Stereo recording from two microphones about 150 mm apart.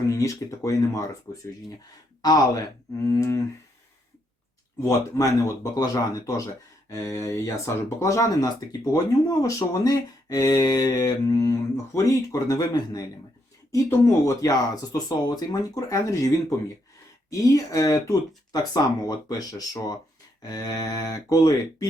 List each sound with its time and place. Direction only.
0.0 s speech: 20° left (ahead or behind)
2.2 s speech: 25° left (ahead or behind)
4.8 s speech: 20° left (ahead or behind)
14.9 s speech: 25° left (ahead or behind)